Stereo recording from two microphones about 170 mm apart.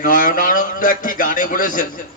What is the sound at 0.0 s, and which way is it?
A man's voice, 55° left (ahead or behind).